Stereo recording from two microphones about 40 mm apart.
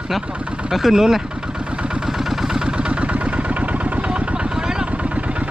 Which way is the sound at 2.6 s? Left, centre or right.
Right.